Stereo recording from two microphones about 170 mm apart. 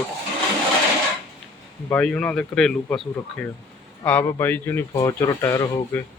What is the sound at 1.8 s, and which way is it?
Speech, 5° left (ahead or behind).